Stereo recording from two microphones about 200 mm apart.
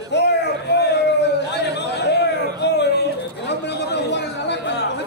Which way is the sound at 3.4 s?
60° left (ahead or behind).